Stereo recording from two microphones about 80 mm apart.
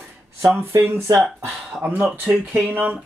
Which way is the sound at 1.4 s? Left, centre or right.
Right.